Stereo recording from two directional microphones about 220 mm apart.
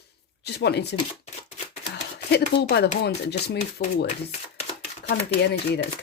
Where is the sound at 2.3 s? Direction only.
45° left (ahead or behind).